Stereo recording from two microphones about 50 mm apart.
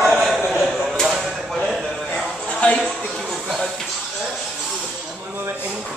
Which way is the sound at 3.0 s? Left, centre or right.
Centre.